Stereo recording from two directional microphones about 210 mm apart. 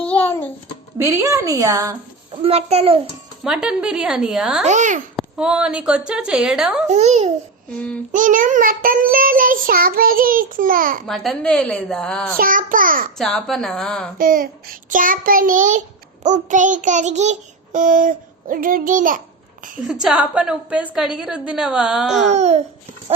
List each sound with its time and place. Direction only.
0.0 s a sound: 10° left (ahead or behind)
0.9 s a woman's voice: 15° right (ahead or behind)
2.4 s a child's voice: 30° right (ahead or behind)
3.4 s a woman's voice: 5° right (ahead or behind)
4.6 s child singing: 35° right (ahead or behind)
5.1 s a woman's voice: 5° right (ahead or behind)
6.8 s child singing: 35° right (ahead or behind)
11.0 s a woman's voice: centre (ahead or behind)
12.4 s child singing: 40° right (ahead or behind)
13.1 s a woman's voice: centre (ahead or behind)
14.2 s child singing: 40° right (ahead or behind)
19.9 s a woman's voice: 5° right (ahead or behind)
22.3 s child singing: 30° right (ahead or behind)